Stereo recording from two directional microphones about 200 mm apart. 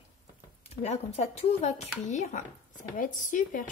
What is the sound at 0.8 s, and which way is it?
A woman's voice, 35° left (ahead or behind).